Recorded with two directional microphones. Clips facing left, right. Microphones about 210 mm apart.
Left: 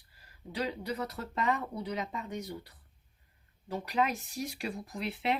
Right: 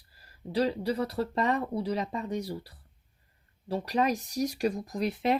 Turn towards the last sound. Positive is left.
turn(degrees=-40)  # may be behind; listen again after turning